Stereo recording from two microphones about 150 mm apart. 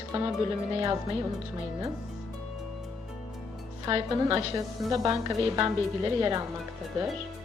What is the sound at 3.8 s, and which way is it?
A woman's voice, 30° right (ahead or behind).